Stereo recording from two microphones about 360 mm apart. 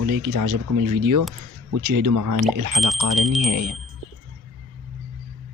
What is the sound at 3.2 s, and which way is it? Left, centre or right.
Speech, centre.